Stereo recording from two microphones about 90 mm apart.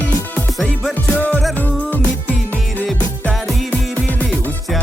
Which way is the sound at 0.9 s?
20° left (ahead or behind).